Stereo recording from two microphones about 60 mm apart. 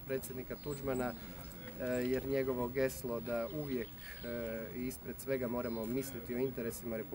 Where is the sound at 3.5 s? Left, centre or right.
Left.